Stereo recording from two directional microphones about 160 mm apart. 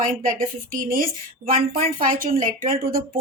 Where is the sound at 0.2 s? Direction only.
60° right (ahead or behind).